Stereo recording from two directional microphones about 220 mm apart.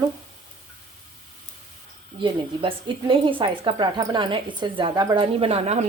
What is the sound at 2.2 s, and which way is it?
Speech, 20° right (ahead or behind).